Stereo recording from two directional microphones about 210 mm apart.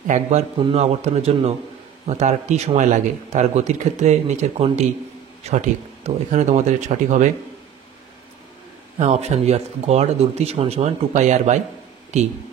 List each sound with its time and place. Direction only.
0.0 s speech: 35° right (ahead or behind)
0.6 s a man's voice: 25° right (ahead or behind)
8.9 s speech: 30° right (ahead or behind)